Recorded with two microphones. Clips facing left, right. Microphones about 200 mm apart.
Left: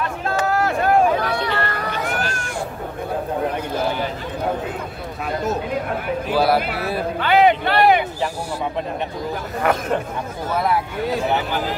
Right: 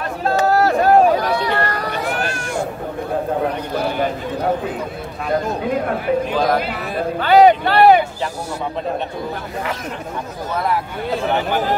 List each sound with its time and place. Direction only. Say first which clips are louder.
0.2 s a sound: right 6 dB; 35° right (ahead or behind)
6.3 s speech: left 4 dB; 10° left (ahead or behind)
7.2 s speech: right 5 dB; 40° right (ahead or behind)